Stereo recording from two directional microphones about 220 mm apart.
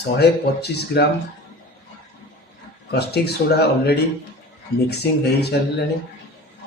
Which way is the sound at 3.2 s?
45° left (ahead or behind).